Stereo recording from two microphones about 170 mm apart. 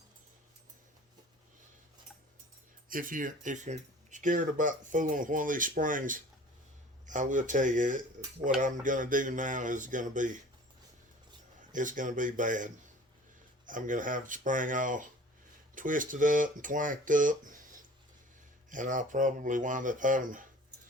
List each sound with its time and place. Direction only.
2.9 s speech: 55° right (ahead or behind)
11.7 s speech: 50° right (ahead or behind)
18.7 s speech: 50° right (ahead or behind)